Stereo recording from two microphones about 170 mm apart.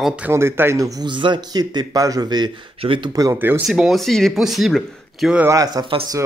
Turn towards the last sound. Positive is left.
turn(degrees=-30)  # may be behind; listen again after turning